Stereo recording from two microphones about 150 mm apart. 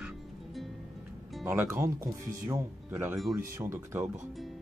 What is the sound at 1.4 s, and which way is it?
Speech, 15° right (ahead or behind).